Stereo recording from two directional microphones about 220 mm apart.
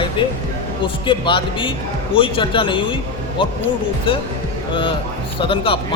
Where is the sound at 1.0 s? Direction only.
20° left (ahead or behind).